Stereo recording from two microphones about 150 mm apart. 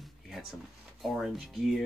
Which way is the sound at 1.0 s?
Centre (ahead or behind).